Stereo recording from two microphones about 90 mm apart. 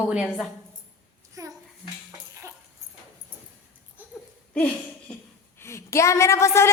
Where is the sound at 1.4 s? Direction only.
40° right (ahead or behind).